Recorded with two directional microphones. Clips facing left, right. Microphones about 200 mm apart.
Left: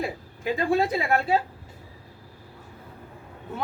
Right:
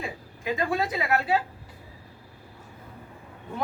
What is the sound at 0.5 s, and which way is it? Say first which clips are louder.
Speech: left 4 dB; 30° left (ahead or behind).